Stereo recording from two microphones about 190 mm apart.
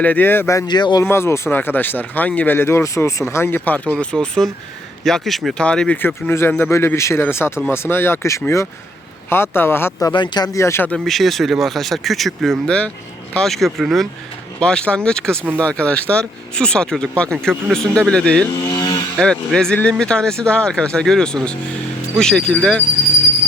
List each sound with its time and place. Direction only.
0.0 s speech: 10° left (ahead or behind)
10.1 s speech: 25° left (ahead or behind); by 18.5 s 5° left (ahead or behind)
18.5 s a sound: 25° left (ahead or behind)
19.2 s speech: 5° left (ahead or behind)